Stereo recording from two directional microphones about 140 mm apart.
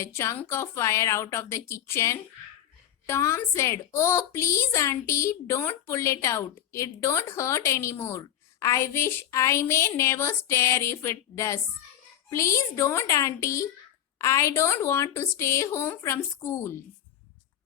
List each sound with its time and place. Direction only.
0.0 s a woman's voice: 20° left (ahead or behind)